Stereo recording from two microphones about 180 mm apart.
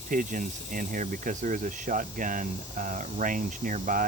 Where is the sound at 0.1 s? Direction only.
45° right (ahead or behind).